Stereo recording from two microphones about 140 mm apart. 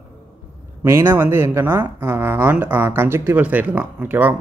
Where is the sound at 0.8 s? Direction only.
20° right (ahead or behind).